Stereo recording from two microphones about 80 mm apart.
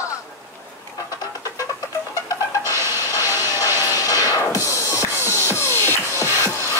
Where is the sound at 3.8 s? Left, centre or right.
Left.